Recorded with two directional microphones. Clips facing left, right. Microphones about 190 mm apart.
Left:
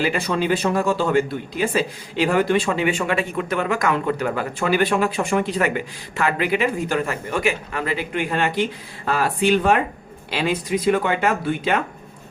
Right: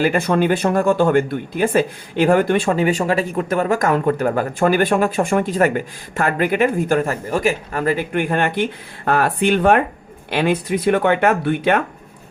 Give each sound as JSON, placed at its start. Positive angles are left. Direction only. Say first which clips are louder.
{"t": 0.0, "sound": "speech", "louder": "right 5 dB", "side_deg": -50}